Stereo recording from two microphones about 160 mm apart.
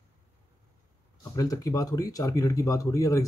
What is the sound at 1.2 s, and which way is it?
Speech, 20° left (ahead or behind).